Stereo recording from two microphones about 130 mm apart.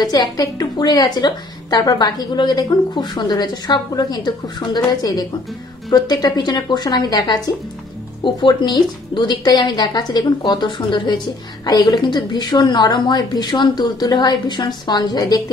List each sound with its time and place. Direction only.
0.0 s a woman's voice: 30° left (ahead or behind)